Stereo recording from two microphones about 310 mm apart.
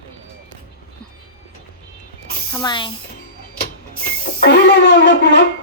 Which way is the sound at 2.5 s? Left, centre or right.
Centre.